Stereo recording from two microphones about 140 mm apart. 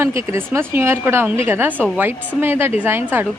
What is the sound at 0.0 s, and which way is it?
A woman's voice, 20° right (ahead or behind).